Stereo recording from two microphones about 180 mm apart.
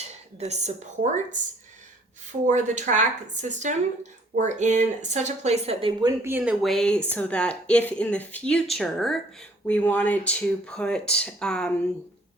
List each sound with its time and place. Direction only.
0.0 s speech: 35° right (ahead or behind)
2.5 s speech: 40° right (ahead or behind)
6.0 s speech: 15° right (ahead or behind); by 11.7 s 5° left (ahead or behind)